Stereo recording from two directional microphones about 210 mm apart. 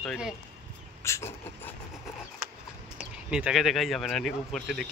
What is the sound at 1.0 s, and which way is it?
Vehicle, 15° left (ahead or behind).